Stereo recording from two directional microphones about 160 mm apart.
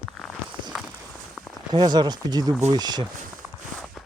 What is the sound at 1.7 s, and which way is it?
Speech, 25° right (ahead or behind).